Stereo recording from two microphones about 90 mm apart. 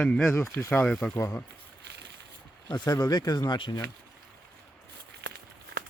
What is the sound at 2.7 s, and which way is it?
Speech, 45° left (ahead or behind).